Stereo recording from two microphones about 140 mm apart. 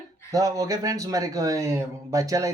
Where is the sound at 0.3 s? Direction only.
25° right (ahead or behind).